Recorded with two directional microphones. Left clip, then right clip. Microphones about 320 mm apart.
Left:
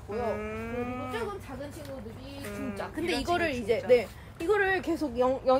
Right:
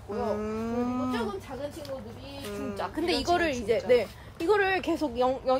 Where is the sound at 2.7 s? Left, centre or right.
Right.